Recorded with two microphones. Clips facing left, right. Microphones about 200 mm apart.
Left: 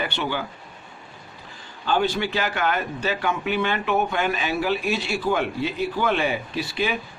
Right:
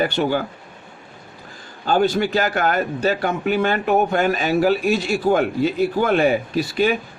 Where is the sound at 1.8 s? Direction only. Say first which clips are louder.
Right 5 dB; 45° right (ahead or behind).